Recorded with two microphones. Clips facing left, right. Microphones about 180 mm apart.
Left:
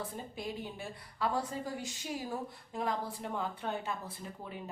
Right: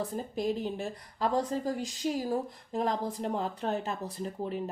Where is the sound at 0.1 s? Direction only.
40° right (ahead or behind).